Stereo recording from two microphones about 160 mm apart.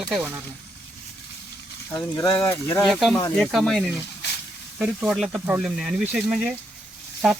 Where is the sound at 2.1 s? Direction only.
20° left (ahead or behind).